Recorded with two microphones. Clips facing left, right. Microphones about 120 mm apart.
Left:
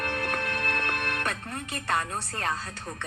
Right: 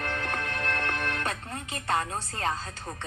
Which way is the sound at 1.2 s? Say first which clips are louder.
Left 1 dB; 25° right (ahead or behind).